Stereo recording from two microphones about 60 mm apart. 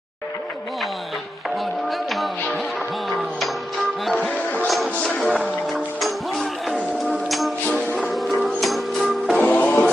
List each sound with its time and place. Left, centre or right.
1.9 s music: centre
4.2 s music: left
5.7 s music: centre
9.4 s music: left